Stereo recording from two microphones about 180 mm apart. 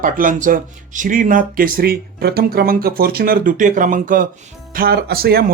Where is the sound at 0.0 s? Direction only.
50° right (ahead or behind).